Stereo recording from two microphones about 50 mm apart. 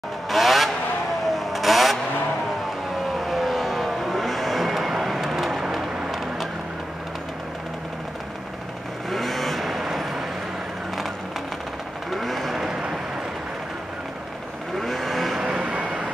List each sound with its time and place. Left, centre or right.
0.3 s vehicle: centre
3.2 s vehicle: centre
9.1 s vehicle: centre
12.1 s vehicle: centre
12.5 s vehicle: centre
14.8 s vehicle: centre
15.3 s vehicle: centre